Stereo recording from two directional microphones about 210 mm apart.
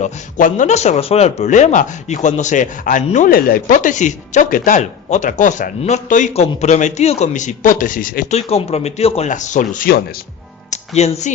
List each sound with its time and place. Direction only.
0.0 s speech: 35° left (ahead or behind)